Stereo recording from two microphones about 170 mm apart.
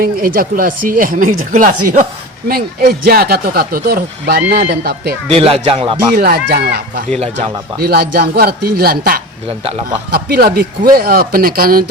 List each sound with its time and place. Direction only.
0.0 s speech: 60° right (ahead or behind)
2.5 s speech: 60° right (ahead or behind)
5.3 s speech: 35° right (ahead or behind)
6.1 s speech: 65° right (ahead or behind)